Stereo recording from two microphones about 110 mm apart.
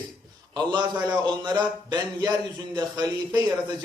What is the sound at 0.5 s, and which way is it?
A man's voice, 45° right (ahead or behind).